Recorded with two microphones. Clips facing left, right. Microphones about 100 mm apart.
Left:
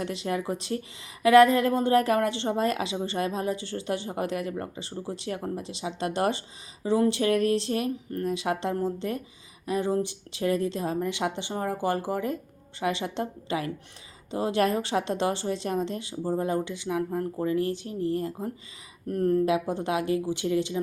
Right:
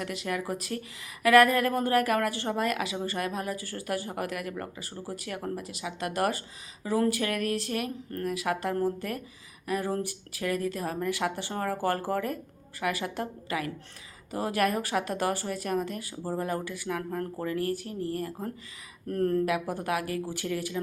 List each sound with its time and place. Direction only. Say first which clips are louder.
0.0 s a woman's voice: left 3 dB; 30° left (ahead or behind); by 19.4 s 15° left (ahead or behind)
19.5 s a woman's voice: left 3 dB; 25° left (ahead or behind)